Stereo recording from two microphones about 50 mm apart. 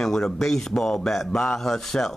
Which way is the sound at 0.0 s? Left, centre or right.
Centre.